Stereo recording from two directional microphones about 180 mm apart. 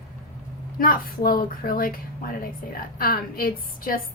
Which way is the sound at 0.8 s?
50° left (ahead or behind).